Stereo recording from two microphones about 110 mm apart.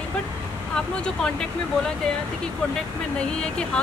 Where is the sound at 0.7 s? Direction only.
5° left (ahead or behind).